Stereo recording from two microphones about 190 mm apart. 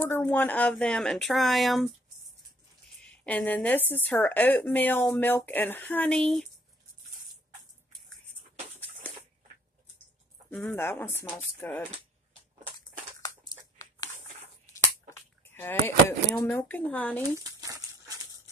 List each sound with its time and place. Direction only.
0.0 s speech: 10° left (ahead or behind)
3.3 s a woman's voice: 10° left (ahead or behind)
10.5 s a woman's voice: 10° left (ahead or behind)
13.2 s a sound: 20° left (ahead or behind)
14.8 s speech: 15° left (ahead or behind)
17.4 s a sound: 20° right (ahead or behind)